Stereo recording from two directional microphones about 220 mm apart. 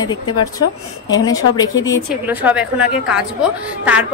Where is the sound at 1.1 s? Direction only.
15° left (ahead or behind).